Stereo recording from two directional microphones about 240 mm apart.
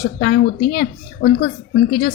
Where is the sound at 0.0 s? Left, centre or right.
Left.